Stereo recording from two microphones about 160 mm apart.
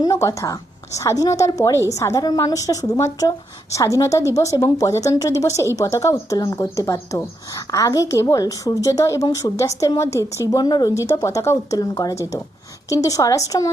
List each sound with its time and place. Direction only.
0.0 s a woman's voice: 20° left (ahead or behind)